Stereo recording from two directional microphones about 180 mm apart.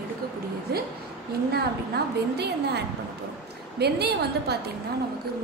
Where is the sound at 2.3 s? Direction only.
65° right (ahead or behind).